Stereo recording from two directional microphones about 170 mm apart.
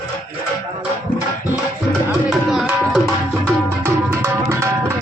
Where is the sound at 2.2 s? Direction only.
Centre (ahead or behind).